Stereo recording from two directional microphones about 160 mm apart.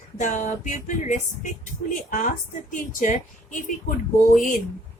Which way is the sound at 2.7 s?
55° left (ahead or behind).